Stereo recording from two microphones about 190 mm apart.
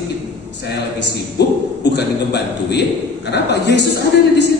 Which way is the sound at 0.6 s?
60° left (ahead or behind).